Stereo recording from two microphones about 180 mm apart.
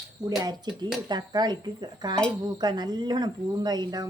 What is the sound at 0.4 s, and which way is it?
Speech, 25° right (ahead or behind).